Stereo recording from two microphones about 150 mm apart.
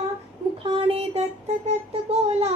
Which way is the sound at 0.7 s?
40° right (ahead or behind).